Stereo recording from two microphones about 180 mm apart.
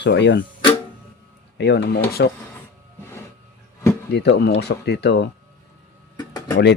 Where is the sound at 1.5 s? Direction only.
70° left (ahead or behind).